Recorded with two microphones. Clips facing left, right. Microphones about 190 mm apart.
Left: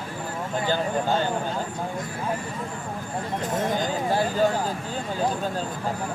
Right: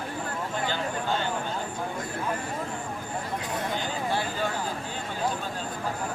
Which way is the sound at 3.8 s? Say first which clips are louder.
Left 5 dB; 40° left (ahead or behind).